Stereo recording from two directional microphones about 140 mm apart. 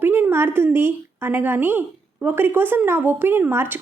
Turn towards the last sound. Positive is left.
turn(degrees=-15)  # may be behind; listen again after turning